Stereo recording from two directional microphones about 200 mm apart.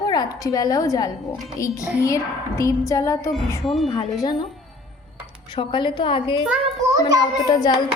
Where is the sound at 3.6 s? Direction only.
Centre (ahead or behind).